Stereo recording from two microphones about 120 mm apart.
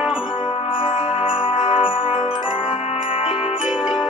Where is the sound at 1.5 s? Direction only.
45° left (ahead or behind).